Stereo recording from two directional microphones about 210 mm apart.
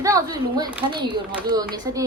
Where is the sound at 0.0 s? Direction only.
15° right (ahead or behind).